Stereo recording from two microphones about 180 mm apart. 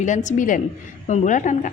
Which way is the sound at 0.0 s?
45° left (ahead or behind).